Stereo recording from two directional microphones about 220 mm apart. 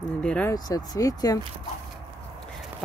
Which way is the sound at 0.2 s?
5° left (ahead or behind).